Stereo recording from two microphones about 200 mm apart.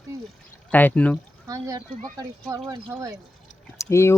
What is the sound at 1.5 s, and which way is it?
Speech, 15° right (ahead or behind).